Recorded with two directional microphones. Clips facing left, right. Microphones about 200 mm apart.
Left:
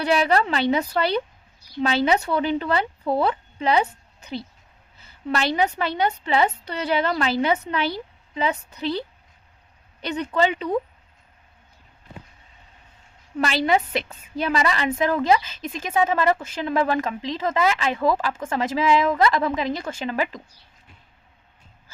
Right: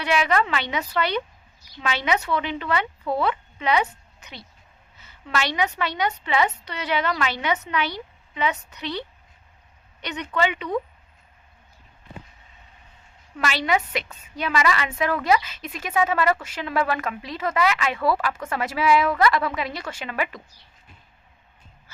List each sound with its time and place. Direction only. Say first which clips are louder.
0.0 s a woman's voice: left 2 dB; 35° left (ahead or behind)
10.0 s a woman's voice: left 3 dB; 35° left (ahead or behind)
13.4 s a woman's voice: left 3 dB; 30° left (ahead or behind)